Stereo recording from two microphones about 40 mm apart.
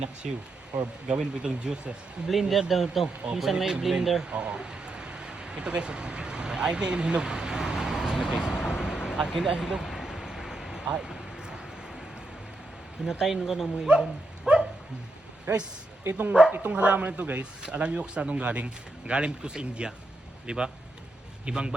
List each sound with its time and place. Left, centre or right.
0.2 s speech: centre
1.0 s speech: right
2.2 s speech: centre
4.3 s a sound: right; by 9.2 s centre
9.6 s speech: centre
9.8 s a sound: centre
13.1 s speech: centre
13.9 s speech: right
14.5 s dog: right
15.5 s speech: right
16.5 s speech: right
17.4 s speech: right